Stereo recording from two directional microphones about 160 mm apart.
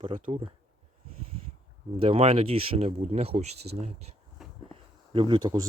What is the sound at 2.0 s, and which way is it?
Speech, 35° right (ahead or behind).